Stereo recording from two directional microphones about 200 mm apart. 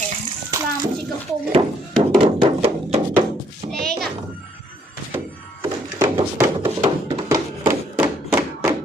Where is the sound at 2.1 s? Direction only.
25° right (ahead or behind).